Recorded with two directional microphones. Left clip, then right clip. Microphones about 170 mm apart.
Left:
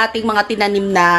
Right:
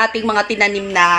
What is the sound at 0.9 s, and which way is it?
Speech, 20° left (ahead or behind).